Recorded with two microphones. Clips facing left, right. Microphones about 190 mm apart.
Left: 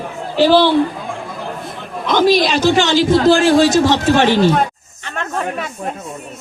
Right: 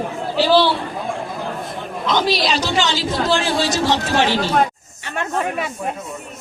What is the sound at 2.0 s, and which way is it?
A man's voice, 50° left (ahead or behind).